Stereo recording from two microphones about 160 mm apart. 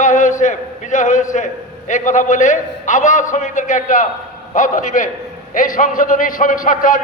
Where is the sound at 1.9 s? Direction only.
50° left (ahead or behind).